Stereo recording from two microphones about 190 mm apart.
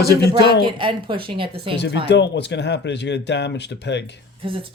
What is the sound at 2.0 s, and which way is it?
Speech, 65° left (ahead or behind).